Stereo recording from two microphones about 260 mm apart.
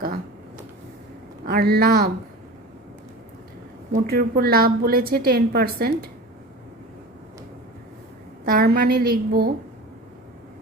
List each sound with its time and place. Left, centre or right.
1.5 s a woman's voice: right
4.0 s a woman's voice: right
8.4 s a woman's voice: right